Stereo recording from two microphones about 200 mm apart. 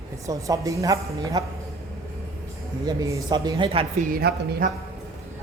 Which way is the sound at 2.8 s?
20° right (ahead or behind).